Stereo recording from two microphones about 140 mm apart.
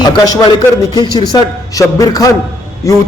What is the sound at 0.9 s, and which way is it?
Speech, 30° left (ahead or behind).